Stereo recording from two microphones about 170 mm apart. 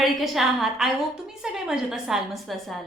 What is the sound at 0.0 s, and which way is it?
A woman's voice, centre (ahead or behind).